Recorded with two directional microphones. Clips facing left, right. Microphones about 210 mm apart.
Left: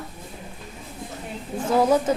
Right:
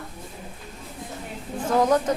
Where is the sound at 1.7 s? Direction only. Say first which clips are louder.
Left 1 dB; 10° left (ahead or behind).